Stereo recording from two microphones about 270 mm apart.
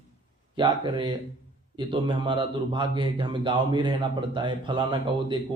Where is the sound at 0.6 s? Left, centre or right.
Centre.